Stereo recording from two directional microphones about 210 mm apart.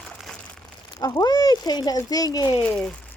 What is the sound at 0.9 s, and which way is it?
Speech, 15° left (ahead or behind).